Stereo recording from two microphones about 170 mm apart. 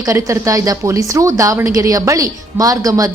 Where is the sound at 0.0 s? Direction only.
20° right (ahead or behind).